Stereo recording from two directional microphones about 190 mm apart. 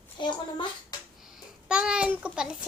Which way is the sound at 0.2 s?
25° left (ahead or behind).